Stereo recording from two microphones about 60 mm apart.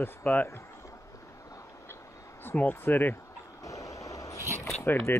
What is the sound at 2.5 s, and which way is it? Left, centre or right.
Speech, left.